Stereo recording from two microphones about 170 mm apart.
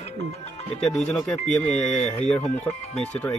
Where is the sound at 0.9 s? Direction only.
5° left (ahead or behind).